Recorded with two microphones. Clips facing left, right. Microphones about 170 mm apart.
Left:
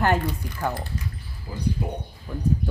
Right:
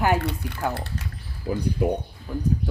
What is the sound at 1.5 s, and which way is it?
Speech, 90° right.